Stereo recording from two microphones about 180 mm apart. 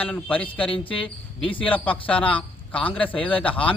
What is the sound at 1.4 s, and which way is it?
Speech, 30° left (ahead or behind).